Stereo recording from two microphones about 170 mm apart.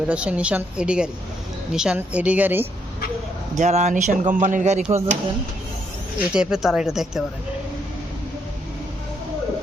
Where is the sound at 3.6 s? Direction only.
40° right (ahead or behind).